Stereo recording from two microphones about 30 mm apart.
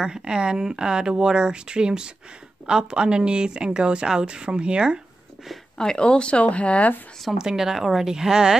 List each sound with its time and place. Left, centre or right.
0.0 s speech: right
5.8 s speech: left
6.4 s speech: left
7.3 s speech: centre
8.1 s speech: right